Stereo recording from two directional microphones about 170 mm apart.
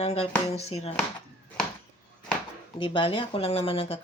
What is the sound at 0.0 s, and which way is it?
Speech, 40° left (ahead or behind).